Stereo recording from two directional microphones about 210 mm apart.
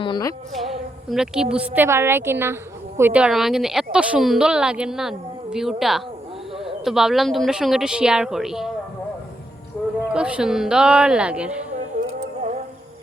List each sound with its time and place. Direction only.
0.0 s speech: 20° left (ahead or behind)
0.5 s a woman's voice: centre (ahead or behind)
10.1 s speech: 5° right (ahead or behind)
11.9 s music: 45° right (ahead or behind)